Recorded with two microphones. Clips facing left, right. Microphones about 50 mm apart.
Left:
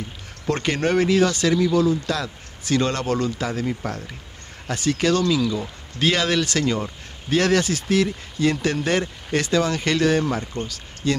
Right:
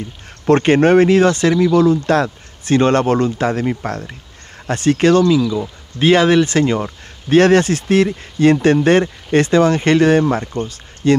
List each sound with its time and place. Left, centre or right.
0.5 s speech: right